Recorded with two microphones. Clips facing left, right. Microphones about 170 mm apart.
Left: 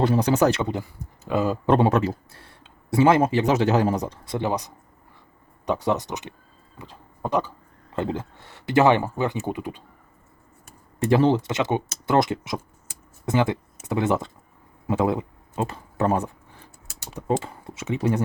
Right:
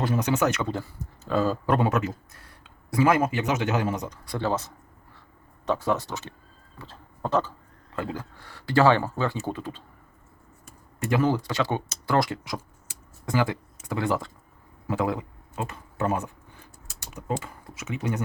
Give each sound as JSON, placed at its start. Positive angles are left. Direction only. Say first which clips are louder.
{"t": 0.0, "sound": "speech", "louder": "left 5 dB", "side_deg": 30}
{"t": 0.6, "sound": "speech", "louder": "left 2 dB", "side_deg": 15}
{"t": 4.4, "sound": "speech", "louder": "left 1 dB", "side_deg": 15}
{"t": 6.7, "sound": "a sound", "louder": "left 2 dB", "side_deg": 15}
{"t": 7.9, "sound": "speech", "louder": "left 5 dB", "side_deg": 25}
{"t": 11.0, "sound": "speech", "louder": "left 5 dB", "side_deg": 30}